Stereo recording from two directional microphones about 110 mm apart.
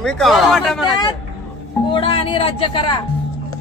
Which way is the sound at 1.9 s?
55° left (ahead or behind).